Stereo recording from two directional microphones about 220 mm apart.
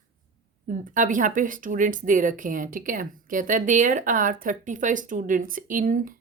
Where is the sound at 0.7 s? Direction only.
35° right (ahead or behind).